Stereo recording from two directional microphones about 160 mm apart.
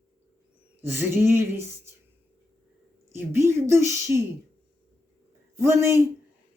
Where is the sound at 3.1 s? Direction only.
15° right (ahead or behind).